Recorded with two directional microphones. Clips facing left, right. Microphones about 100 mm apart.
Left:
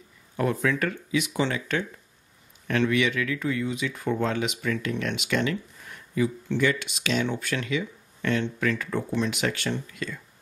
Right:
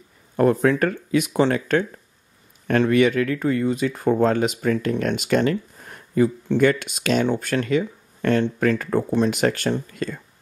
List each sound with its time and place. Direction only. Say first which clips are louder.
0.4 s speech: right 7 dB; 45° right (ahead or behind)